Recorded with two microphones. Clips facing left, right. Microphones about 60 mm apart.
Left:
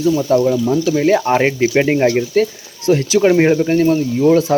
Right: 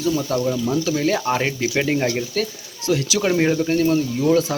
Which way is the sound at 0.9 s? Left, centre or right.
Left.